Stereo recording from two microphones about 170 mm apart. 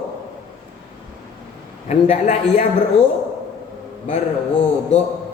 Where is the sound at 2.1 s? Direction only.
40° left (ahead or behind).